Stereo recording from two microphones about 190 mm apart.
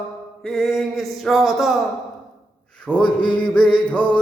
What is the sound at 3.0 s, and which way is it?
Mantra, 25° left (ahead or behind).